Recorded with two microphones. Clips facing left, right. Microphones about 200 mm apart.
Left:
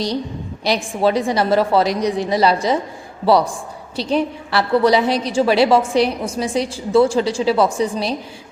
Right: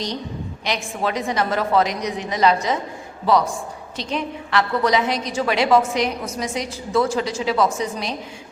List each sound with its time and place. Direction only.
1.0 s a woman's voice: 30° left (ahead or behind)